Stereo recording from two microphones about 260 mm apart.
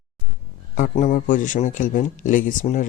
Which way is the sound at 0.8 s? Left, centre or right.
Left.